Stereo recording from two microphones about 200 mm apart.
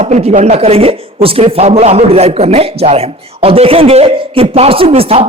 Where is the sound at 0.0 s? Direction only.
35° right (ahead or behind).